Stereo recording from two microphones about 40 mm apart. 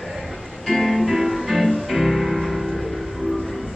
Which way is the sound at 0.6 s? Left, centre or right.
Centre.